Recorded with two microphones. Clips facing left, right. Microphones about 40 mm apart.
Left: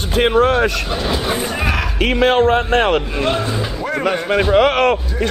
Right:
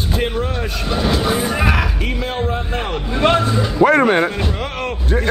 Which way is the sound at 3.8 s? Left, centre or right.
Right.